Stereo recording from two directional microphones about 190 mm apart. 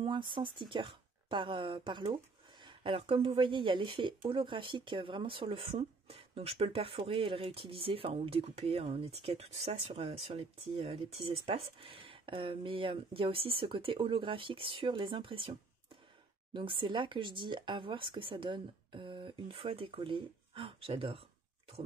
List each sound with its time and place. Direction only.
0.0 s speech: 25° right (ahead or behind)
16.5 s speech: 25° right (ahead or behind)